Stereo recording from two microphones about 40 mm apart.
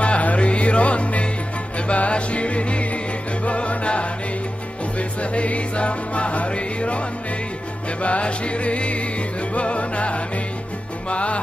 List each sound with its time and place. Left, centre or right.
0.0 s music: left
8.0 s music: left